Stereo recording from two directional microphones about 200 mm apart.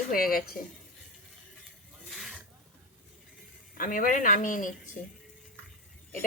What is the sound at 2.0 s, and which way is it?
Snake, centre (ahead or behind).